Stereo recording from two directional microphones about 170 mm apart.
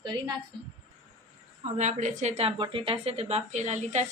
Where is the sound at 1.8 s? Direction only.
45° right (ahead or behind).